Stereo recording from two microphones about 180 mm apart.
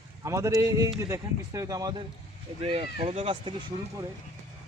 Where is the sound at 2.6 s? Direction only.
30° right (ahead or behind).